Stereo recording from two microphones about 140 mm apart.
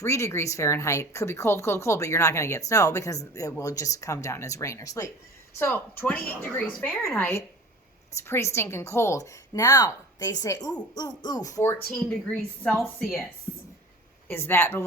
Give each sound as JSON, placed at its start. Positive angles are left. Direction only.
{"t": 0.0, "sound": "speech", "side_deg": 20}
{"t": 14.3, "sound": "speech", "side_deg": 15}